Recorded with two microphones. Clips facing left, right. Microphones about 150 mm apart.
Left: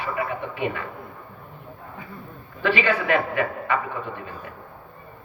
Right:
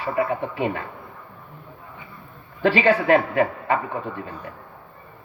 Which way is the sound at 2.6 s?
35° right (ahead or behind).